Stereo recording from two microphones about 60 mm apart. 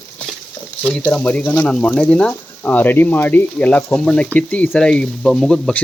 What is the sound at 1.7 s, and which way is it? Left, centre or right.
Speech, centre.